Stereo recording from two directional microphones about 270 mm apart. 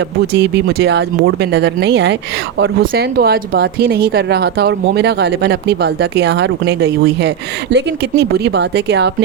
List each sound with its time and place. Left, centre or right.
0.3 s speech: right